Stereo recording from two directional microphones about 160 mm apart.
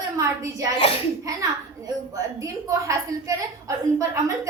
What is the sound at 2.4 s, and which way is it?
A woman's voice, 20° right (ahead or behind).